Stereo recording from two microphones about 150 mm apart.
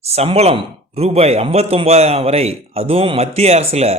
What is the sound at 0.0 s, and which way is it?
A man's voice, 45° right (ahead or behind).